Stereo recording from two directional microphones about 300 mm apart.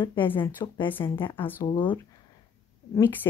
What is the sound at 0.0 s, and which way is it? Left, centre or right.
Speech, centre.